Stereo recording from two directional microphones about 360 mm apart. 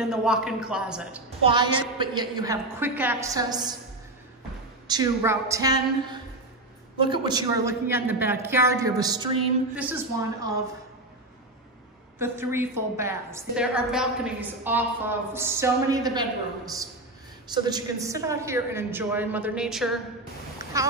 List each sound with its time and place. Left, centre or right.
0.0 s a man's voice: centre
1.4 s a woman's voice: centre
4.8 s a woman's voice: centre
12.2 s a woman's voice: centre